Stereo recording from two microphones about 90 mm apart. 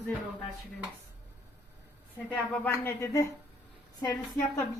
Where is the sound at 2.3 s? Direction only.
15° left (ahead or behind).